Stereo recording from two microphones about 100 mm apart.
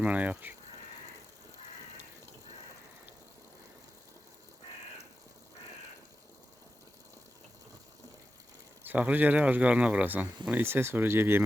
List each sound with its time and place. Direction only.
0.0 s speech: 15° right (ahead or behind)
8.8 s speech: 15° right (ahead or behind)